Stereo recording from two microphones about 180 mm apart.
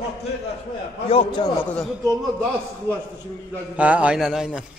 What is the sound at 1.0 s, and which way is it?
Speech, 30° left (ahead or behind).